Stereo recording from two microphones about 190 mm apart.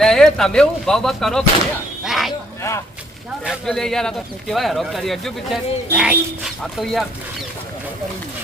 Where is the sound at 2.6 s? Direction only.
15° left (ahead or behind).